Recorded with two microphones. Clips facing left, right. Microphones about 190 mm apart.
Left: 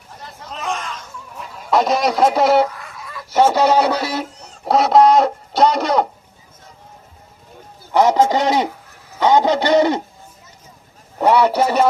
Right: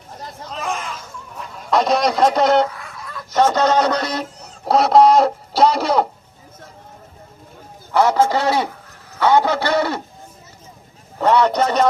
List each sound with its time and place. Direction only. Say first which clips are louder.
0.4 s a sound: even; centre (ahead or behind)
7.9 s a man's voice: left 2 dB; 15° left (ahead or behind)
11.2 s a man's voice: left 1 dB; 10° left (ahead or behind)